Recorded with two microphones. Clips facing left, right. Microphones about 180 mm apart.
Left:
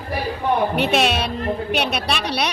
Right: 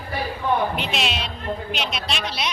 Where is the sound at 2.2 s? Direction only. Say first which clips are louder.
Left 5 dB; 65° left (ahead or behind).